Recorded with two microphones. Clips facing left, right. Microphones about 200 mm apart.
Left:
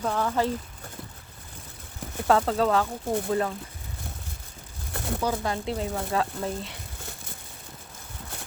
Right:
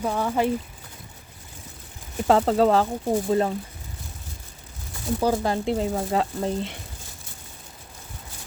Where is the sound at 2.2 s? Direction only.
25° right (ahead or behind).